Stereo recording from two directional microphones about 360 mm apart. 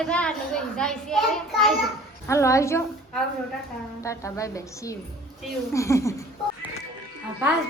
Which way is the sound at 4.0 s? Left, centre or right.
Centre.